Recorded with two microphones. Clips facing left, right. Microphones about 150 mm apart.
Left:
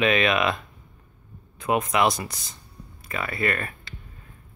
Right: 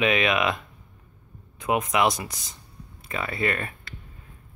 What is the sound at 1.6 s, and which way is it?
Speech, 15° right (ahead or behind).